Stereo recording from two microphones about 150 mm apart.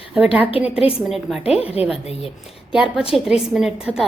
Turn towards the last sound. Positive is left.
turn(degrees=-5)  # may be behind; listen again after turning